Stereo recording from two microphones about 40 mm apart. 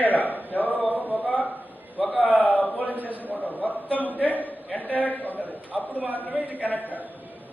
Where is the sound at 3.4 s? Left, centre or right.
Left.